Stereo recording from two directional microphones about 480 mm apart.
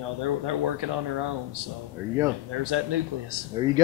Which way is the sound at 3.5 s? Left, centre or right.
Centre.